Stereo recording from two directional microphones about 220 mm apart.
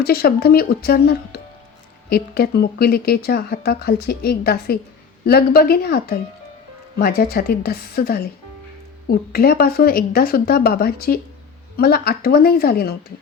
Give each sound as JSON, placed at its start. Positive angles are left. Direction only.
{"t": 0.0, "sound": "speech", "side_deg": 45}